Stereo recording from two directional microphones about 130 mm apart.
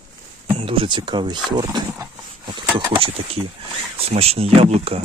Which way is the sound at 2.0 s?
35° right (ahead or behind).